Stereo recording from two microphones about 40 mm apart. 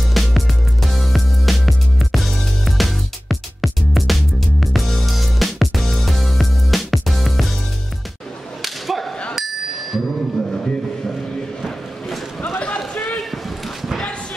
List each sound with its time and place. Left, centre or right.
0.1 s music: centre
8.6 s whip: centre
9.3 s bicycle bell: centre
10.5 s a sound: centre
12.5 s run: left